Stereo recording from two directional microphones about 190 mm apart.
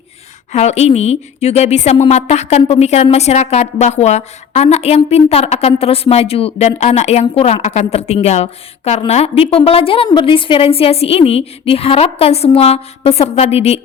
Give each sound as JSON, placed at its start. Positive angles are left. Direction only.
{"t": 0.5, "sound": "a woman's voice", "side_deg": 35}